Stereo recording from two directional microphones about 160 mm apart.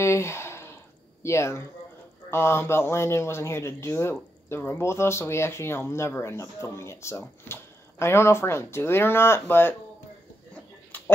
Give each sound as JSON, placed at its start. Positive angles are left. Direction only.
{"t": 0.0, "sound": "sigh", "side_deg": 15}
{"t": 1.2, "sound": "speech", "side_deg": 15}